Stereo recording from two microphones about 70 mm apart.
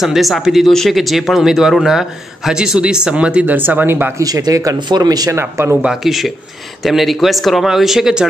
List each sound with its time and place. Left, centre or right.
0.0 s speech: centre
3.5 s speech: right
4.2 s speech: right
4.7 s speech: right
5.3 s speech: right
5.8 s speech: centre